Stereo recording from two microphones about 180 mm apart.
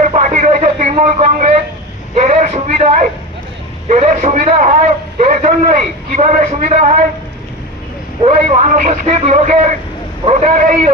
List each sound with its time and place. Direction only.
0.0 s radio: 45° right (ahead or behind)
2.1 s a sound: 40° right (ahead or behind)
3.8 s a man's voice: 40° right (ahead or behind)
8.2 s a man's voice: 40° right (ahead or behind)